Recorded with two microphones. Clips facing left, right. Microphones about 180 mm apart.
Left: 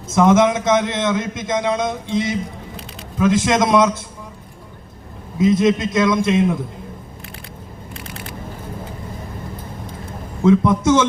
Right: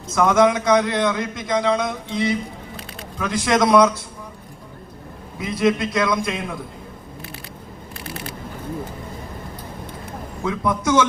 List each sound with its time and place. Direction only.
0.1 s a man's voice: 25° left (ahead or behind)
5.4 s a man's voice: 20° left (ahead or behind)
10.4 s a man's voice: 25° left (ahead or behind)